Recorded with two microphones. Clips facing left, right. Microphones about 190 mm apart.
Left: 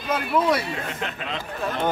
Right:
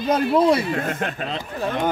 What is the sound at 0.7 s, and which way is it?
Speech, 50° right (ahead or behind).